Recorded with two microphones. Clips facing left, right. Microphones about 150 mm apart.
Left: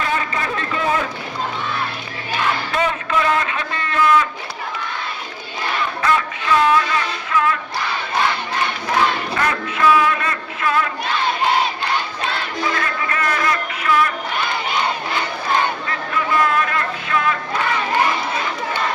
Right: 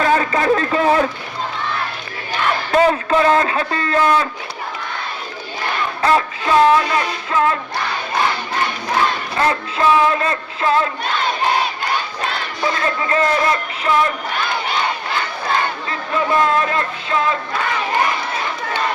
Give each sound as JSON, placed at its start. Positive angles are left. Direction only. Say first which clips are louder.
{"t": 0.0, "sound": "a sound", "louder": "right 6 dB", "side_deg": -40}
{"t": 2.7, "sound": "a sound", "louder": "right 9 dB", "side_deg": -35}
{"t": 6.0, "sound": "music", "louder": "right 5 dB", "side_deg": -35}
{"t": 9.4, "sound": "music", "louder": "right 2 dB", "side_deg": -30}
{"t": 12.7, "sound": "music", "louder": "right 4 dB", "side_deg": -30}
{"t": 15.9, "sound": "speech", "louder": "right 2 dB", "side_deg": -25}